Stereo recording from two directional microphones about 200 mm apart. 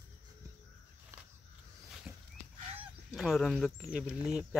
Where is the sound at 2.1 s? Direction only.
10° right (ahead or behind).